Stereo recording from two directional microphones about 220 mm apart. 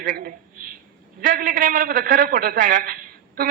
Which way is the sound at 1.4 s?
35° right (ahead or behind).